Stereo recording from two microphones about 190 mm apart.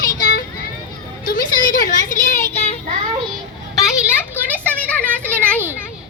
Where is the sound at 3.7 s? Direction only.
Centre (ahead or behind).